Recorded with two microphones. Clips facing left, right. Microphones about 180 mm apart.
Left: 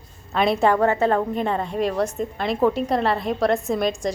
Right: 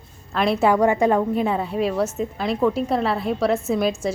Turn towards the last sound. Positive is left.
turn(degrees=-5)  # may be behind; listen again after turning